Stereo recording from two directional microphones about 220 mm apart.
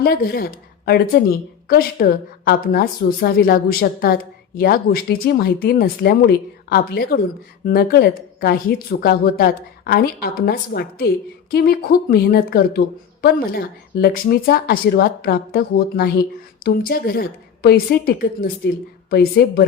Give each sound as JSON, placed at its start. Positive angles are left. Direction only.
{"t": 0.0, "sound": "a woman's voice", "side_deg": 45}